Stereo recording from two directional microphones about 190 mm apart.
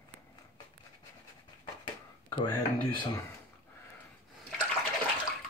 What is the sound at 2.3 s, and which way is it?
Speech, 25° left (ahead or behind).